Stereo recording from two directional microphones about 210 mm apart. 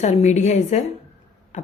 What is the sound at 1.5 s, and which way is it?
Beatboxing, 35° left (ahead or behind).